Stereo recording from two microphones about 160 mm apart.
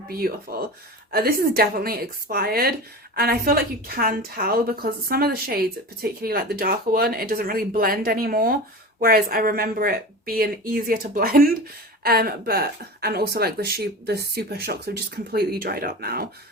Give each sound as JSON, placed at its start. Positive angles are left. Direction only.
{"t": 0.1, "sound": "speech", "side_deg": -70}